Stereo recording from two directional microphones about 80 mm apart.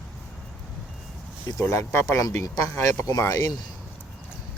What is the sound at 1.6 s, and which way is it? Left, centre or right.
Speech, left.